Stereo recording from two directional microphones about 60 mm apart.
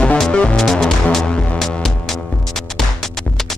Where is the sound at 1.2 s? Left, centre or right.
Centre.